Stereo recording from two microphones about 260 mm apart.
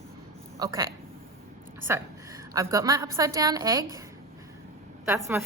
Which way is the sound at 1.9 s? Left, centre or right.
Centre.